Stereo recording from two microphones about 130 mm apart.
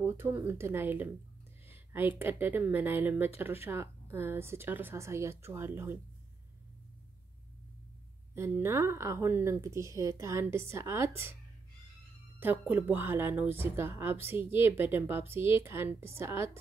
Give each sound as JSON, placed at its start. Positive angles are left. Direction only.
{"t": 0.0, "sound": "a woman's voice", "side_deg": -15}
{"t": 8.4, "sound": "a woman's voice", "side_deg": -20}
{"t": 12.4, "sound": "a woman's voice", "side_deg": -15}